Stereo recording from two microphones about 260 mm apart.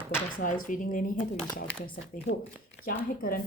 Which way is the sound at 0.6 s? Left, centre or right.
Left.